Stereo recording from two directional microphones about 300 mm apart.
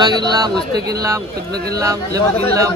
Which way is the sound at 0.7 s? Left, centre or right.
Right.